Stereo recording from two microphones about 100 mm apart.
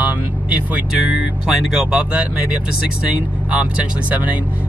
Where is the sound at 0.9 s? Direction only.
5° right (ahead or behind).